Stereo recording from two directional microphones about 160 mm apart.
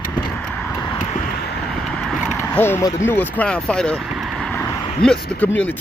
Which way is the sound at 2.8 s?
15° left (ahead or behind).